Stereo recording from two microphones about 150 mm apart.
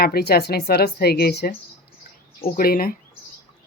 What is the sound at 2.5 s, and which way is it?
Speech, 80° left.